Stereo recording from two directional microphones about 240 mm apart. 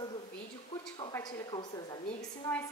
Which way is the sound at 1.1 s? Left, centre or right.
Centre.